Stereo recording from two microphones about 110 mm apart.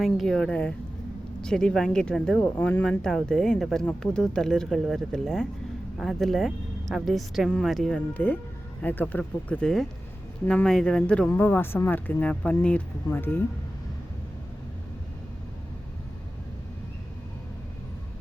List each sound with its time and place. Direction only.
0.0 s speech: 5° left (ahead or behind)
2.4 s speech: 20° left (ahead or behind)
3.0 s speech: 5° left (ahead or behind)
8.1 s speech: 15° left (ahead or behind)
11.3 s speech: 20° left (ahead or behind)